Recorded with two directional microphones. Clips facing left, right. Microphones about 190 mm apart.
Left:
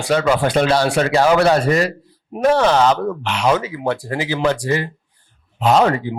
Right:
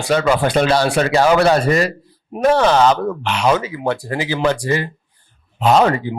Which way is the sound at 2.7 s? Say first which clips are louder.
Right 1 dB; 40° left (ahead or behind).